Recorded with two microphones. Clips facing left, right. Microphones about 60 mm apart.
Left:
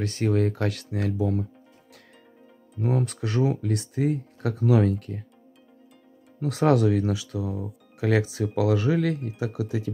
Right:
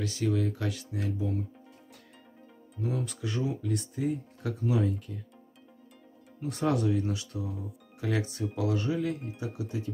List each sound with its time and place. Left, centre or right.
0.0 s speech: left
2.8 s speech: left
6.4 s speech: left